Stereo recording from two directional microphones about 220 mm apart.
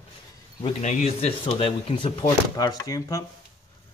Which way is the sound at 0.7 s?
30° left (ahead or behind).